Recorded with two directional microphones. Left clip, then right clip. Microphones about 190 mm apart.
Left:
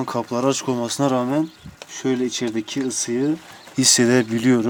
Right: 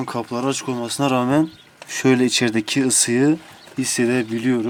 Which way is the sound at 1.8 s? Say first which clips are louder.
Right 5 dB; 30° right (ahead or behind).